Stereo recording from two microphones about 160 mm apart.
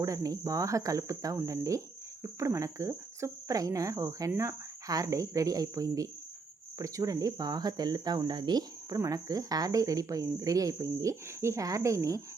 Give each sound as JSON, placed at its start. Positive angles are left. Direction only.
{"t": 0.0, "sound": "speech", "side_deg": -20}